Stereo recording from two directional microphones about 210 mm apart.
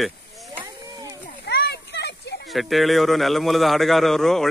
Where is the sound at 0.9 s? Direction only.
15° right (ahead or behind).